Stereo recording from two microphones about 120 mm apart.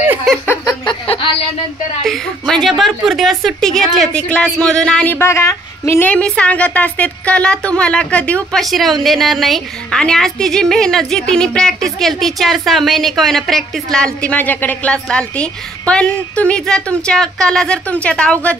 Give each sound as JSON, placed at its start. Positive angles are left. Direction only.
{"t": 0.8, "sound": "a sound", "side_deg": 45}
{"t": 2.0, "sound": "a woman's voice", "side_deg": 5}
{"t": 6.0, "sound": "a woman's voice", "side_deg": 10}